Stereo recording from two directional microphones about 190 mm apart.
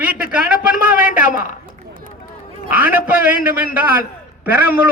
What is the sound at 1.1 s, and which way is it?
Speech, 45° left (ahead or behind).